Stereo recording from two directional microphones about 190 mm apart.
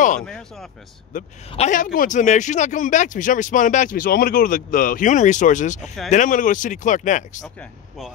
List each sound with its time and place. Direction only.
1.1 s a man's voice: 45° left (ahead or behind)